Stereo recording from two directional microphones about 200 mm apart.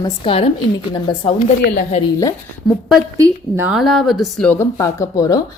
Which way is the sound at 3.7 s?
Centre (ahead or behind).